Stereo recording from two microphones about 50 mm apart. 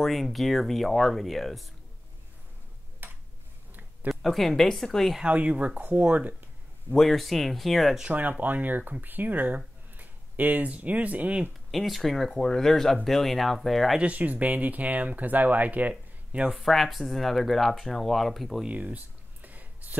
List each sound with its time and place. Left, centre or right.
0.0 s speech: centre
3.0 s a sound: right
4.1 s speech: centre
5.2 s speech: right
5.8 s speech: right
7.0 s speech: centre
8.1 s speech: right
9.9 s a sound: right
10.7 s speech: right
11.7 s speech: centre
13.9 s speech: right
16.3 s a sound: right
16.5 s speech: centre
18.7 s a sound: right